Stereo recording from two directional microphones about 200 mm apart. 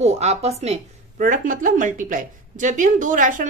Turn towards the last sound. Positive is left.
turn(degrees=-40)  # may be behind; listen again after turning